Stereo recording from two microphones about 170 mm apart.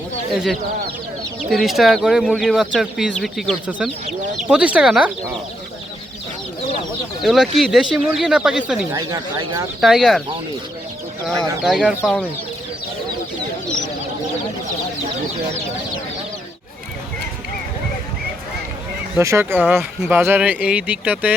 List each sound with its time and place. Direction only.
1.4 s speech: centre (ahead or behind)
7.2 s speech: centre (ahead or behind)
8.9 s speech: 20° right (ahead or behind)
9.8 s speech: centre (ahead or behind)
11.6 s speech: 5° right (ahead or behind)
19.1 s speech: 15° right (ahead or behind)